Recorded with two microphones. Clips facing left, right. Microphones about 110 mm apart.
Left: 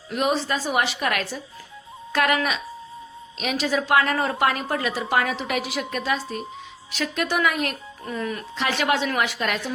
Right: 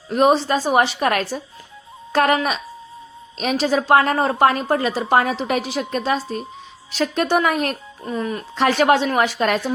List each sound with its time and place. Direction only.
0.1 s a woman's voice: 35° right (ahead or behind)
8.0 s speech: 25° right (ahead or behind)
8.5 s a woman's voice: 45° right (ahead or behind)